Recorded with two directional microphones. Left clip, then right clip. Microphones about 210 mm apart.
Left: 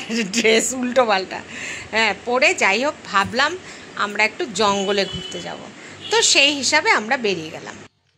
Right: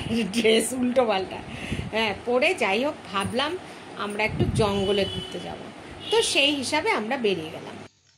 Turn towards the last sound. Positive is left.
turn(degrees=10)  # may be behind; listen again after turning